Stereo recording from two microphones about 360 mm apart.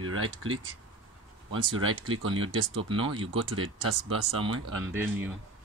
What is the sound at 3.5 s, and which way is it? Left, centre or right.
Speech, right.